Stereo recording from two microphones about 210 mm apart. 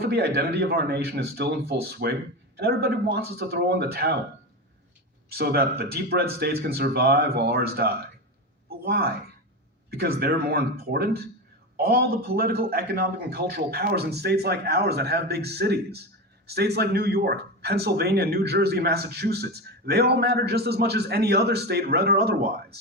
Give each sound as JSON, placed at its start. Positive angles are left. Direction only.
{"t": 0.0, "sound": "speech", "side_deg": -50}
{"t": 5.3, "sound": "speech", "side_deg": -50}